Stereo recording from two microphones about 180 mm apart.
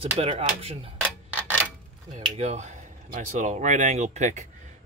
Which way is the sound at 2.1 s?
40° right (ahead or behind).